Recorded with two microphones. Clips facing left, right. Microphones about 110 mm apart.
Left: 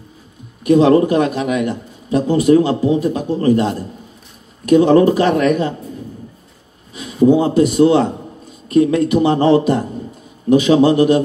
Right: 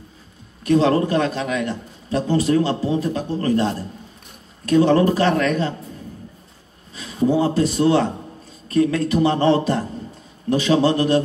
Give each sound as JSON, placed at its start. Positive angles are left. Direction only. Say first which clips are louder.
{"t": 0.7, "sound": "a man's voice", "louder": "left 6 dB", "side_deg": 15}
{"t": 7.0, "sound": "a man's voice", "louder": "left 6 dB", "side_deg": 20}